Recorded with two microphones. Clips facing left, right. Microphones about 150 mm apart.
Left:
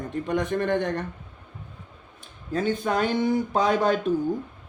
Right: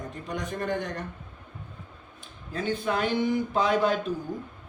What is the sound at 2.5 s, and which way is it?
Speech, 40° left (ahead or behind).